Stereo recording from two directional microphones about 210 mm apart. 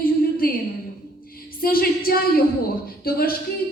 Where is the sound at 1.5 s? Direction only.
45° left (ahead or behind).